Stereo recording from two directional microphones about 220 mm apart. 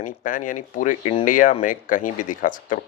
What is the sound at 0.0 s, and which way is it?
Speech, 35° left (ahead or behind).